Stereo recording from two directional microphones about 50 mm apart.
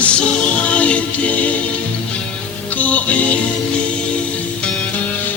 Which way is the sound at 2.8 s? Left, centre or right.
Left.